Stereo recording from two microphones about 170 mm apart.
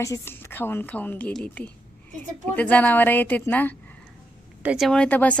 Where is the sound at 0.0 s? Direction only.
15° left (ahead or behind).